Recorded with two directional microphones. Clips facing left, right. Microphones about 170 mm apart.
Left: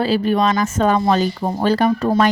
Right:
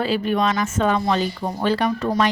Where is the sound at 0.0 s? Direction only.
35° left (ahead or behind).